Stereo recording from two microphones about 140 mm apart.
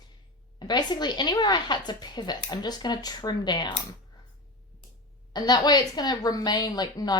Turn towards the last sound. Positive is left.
turn(degrees=30)  # may be behind; listen again after turning